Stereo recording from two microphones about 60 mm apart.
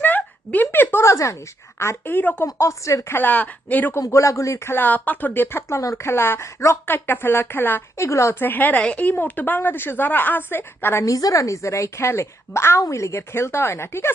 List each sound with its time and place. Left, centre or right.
0.0 s a sound: left
1.0 s a woman's voice: left
1.8 s a woman's voice: left
2.6 s a woman's voice: left
3.2 s a woman's voice: left
4.0 s a woman's voice: left
4.6 s a woman's voice: left
6.8 s a woman's voice: left
7.9 s speech: left
8.4 s a woman's voice: left
10.6 s speech: left
11.0 s a woman's voice: left